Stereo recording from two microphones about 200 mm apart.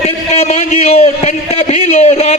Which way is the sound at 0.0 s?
30° left (ahead or behind).